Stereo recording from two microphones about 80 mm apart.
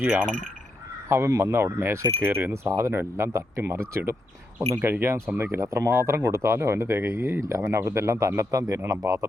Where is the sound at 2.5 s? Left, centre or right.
Right.